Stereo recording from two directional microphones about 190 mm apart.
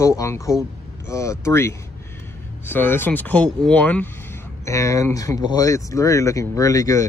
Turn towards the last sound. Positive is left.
turn(degrees=15)  # may be behind; listen again after turning